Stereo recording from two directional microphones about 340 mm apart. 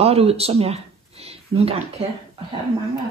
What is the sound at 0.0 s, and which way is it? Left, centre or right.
Speech, centre.